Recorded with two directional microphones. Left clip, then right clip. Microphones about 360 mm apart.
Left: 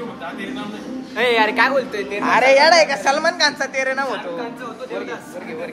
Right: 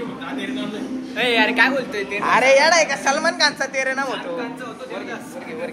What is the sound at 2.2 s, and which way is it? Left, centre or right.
A woman's voice, centre.